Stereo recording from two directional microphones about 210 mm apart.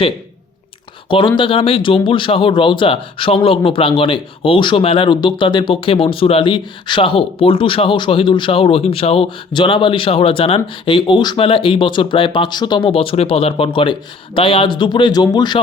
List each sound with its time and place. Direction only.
1.0 s speech: 25° left (ahead or behind)